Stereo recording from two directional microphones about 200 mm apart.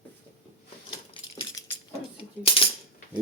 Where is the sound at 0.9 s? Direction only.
20° left (ahead or behind).